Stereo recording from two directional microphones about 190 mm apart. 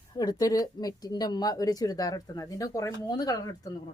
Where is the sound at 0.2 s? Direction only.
20° left (ahead or behind).